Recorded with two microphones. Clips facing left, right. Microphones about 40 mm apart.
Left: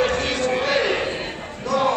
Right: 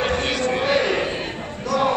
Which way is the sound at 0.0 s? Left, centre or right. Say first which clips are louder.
Left 1 dB; centre.